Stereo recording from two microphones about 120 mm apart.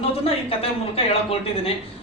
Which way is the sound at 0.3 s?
50° left (ahead or behind).